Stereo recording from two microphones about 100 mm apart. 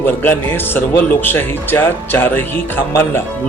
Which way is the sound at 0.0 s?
20° left (ahead or behind).